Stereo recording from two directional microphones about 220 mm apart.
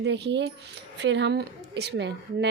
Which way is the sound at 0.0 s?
50° right (ahead or behind).